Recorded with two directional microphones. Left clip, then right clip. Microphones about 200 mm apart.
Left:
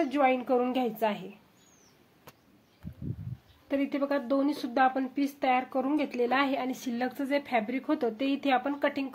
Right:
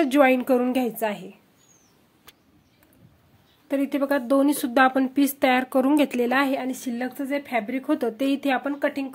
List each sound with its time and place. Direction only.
0.0 s speech: 40° right (ahead or behind); by 1.3 s 20° right (ahead or behind)
3.6 s speech: 25° right (ahead or behind)